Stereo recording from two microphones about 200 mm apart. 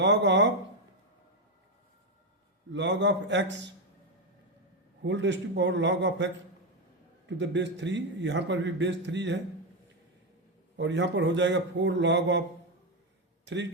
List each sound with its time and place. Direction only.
0.0 s a man's voice: 60° right (ahead or behind)
2.7 s a man's voice: 65° right (ahead or behind)
5.0 s a man's voice: 60° right (ahead or behind)
10.8 s a man's voice: 60° right (ahead or behind)
13.4 s a man's voice: 65° right (ahead or behind)